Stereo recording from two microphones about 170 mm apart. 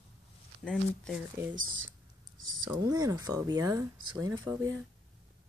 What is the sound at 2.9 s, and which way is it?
Speech, 20° right (ahead or behind).